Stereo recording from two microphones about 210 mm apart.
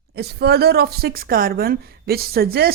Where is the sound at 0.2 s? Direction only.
50° right (ahead or behind).